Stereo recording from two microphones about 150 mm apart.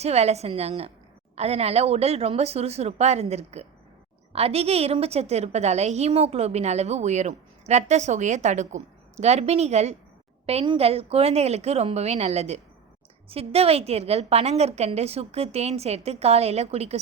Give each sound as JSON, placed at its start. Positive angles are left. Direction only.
{"t": 0.0, "sound": "a woman's voice", "side_deg": -45}